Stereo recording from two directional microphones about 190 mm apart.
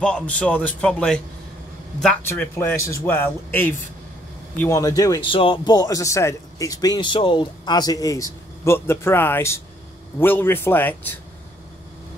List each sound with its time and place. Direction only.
0.0 s a man's voice: 5° left (ahead or behind)